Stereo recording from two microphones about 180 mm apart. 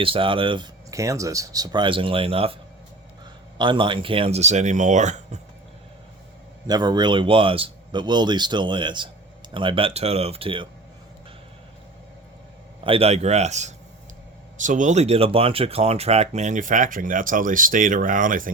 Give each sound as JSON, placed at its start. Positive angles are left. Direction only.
{"t": 0.0, "sound": "speech", "side_deg": -30}
{"t": 3.6, "sound": "speech", "side_deg": -25}
{"t": 6.7, "sound": "speech", "side_deg": -20}
{"t": 12.8, "sound": "speech", "side_deg": -30}